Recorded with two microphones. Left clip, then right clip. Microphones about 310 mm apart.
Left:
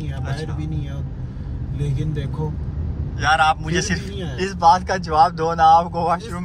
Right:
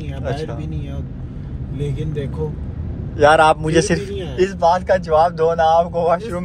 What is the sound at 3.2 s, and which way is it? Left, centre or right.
Speech, centre.